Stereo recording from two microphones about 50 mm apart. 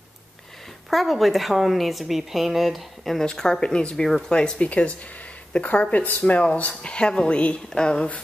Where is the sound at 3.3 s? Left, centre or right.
Centre.